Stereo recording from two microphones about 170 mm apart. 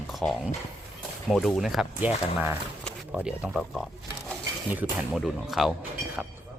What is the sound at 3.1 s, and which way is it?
Speech, 5° right (ahead or behind).